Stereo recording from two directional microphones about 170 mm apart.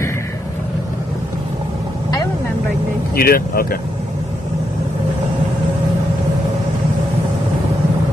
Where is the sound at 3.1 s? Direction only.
60° left (ahead or behind).